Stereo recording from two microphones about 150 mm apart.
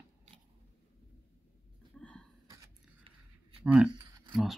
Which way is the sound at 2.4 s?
20° right (ahead or behind).